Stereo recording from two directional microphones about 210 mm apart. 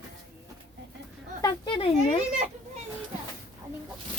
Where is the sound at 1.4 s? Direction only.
20° left (ahead or behind).